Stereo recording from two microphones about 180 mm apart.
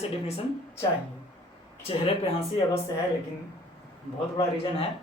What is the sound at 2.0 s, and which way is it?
Speech, 30° left (ahead or behind).